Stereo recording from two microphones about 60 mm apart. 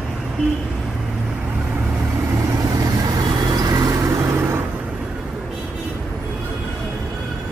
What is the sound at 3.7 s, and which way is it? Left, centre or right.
Vehicle, right.